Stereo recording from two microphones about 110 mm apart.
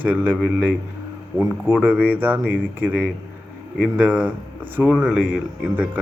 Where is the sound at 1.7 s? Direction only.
10° right (ahead or behind).